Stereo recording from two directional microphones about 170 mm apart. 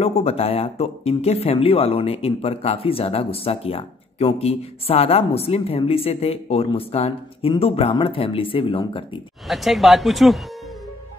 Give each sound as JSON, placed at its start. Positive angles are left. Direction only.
{"t": 0.0, "sound": "speech", "side_deg": 40}
{"t": 9.5, "sound": "speech", "side_deg": 0}